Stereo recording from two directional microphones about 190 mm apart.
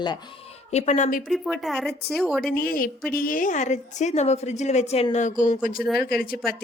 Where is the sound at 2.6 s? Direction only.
50° left (ahead or behind); by 5.3 s 35° left (ahead or behind).